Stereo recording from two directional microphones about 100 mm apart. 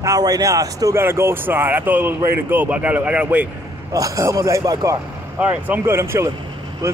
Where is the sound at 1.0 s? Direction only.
25° right (ahead or behind).